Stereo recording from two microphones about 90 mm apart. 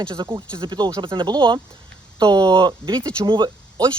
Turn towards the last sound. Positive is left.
turn(degrees=-55)  # may be behind; listen again after turning